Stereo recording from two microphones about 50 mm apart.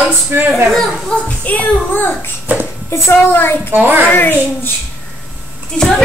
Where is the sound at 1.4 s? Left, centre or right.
Left.